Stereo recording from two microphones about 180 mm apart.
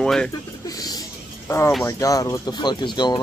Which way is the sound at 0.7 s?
20° left (ahead or behind).